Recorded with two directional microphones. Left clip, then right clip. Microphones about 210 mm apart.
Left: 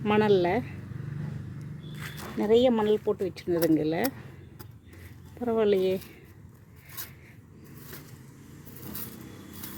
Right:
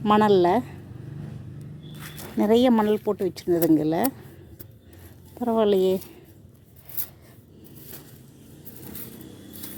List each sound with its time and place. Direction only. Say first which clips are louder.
0.0 s speech: right 5 dB; 20° right (ahead or behind)
2.4 s speech: right 3 dB; 30° right (ahead or behind)
5.4 s speech: right 4 dB; 15° right (ahead or behind)